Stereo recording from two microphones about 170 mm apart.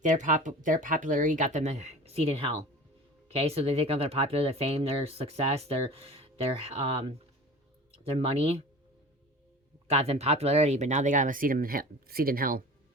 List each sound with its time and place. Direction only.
0.0 s speech: 45° right (ahead or behind)
9.8 s speech: 40° right (ahead or behind); by 12.6 s 55° right (ahead or behind)